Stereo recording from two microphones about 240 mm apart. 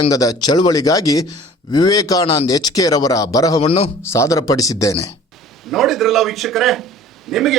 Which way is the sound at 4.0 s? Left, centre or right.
Centre.